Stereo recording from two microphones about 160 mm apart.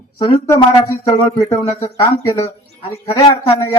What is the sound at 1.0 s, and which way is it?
A man's voice, 20° left (ahead or behind).